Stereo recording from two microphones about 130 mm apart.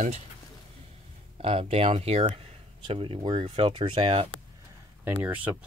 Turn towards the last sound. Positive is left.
turn(degrees=-15)  # may be behind; listen again after turning